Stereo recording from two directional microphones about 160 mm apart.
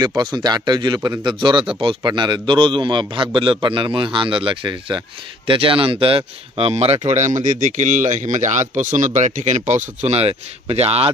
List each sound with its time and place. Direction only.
0.0 s a man's voice: 25° right (ahead or behind)